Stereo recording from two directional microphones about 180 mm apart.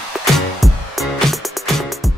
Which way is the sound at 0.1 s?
Centre (ahead or behind).